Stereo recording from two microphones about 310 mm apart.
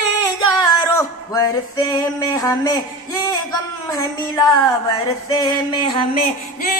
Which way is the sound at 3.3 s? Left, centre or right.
Centre.